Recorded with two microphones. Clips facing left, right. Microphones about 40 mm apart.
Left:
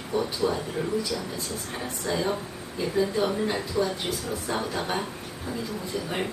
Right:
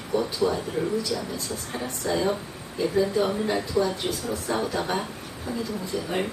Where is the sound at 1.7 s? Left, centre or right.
Centre.